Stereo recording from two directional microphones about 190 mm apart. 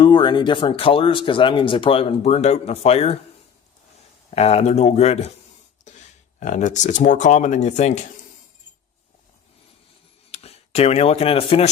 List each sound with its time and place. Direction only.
0.0 s speech: 25° left (ahead or behind)
4.4 s speech: 35° left (ahead or behind)
6.4 s speech: 40° left (ahead or behind)
10.3 s speech: 35° left (ahead or behind)